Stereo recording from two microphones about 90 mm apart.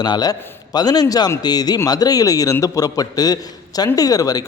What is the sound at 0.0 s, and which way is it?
A man's voice, 50° left (ahead or behind).